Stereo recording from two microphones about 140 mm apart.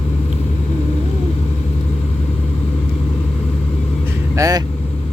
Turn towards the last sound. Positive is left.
turn(degrees=-25)  # may be behind; listen again after turning